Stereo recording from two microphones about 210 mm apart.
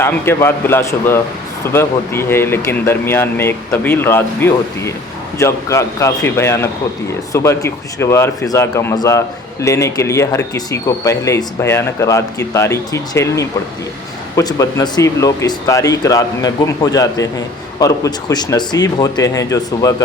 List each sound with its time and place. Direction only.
0.0 s speech: 10° left (ahead or behind)